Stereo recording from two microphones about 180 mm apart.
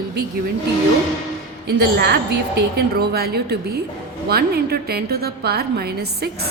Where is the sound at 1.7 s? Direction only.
65° right (ahead or behind).